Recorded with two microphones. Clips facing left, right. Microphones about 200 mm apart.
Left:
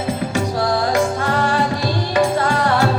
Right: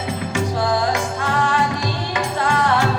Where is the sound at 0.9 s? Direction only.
35° left (ahead or behind).